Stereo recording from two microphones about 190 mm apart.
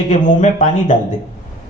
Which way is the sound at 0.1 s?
40° left (ahead or behind).